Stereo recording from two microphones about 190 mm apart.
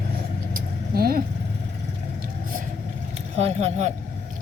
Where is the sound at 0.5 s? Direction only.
50° right (ahead or behind).